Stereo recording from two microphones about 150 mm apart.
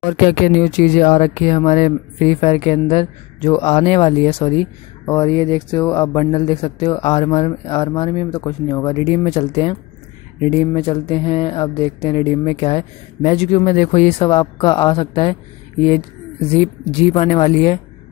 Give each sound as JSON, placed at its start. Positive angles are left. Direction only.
{"t": 0.2, "sound": "speech", "side_deg": 70}
{"t": 1.1, "sound": "speech", "side_deg": 50}
{"t": 5.9, "sound": "speech", "side_deg": 15}
{"t": 6.1, "sound": "speech", "side_deg": 35}
{"t": 8.4, "sound": "speech", "side_deg": 20}
{"t": 8.9, "sound": "speech", "side_deg": 40}
{"t": 16.6, "sound": "speech", "side_deg": 50}